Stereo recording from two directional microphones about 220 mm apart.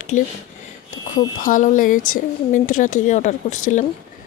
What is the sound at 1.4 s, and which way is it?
Speech, 35° left (ahead or behind).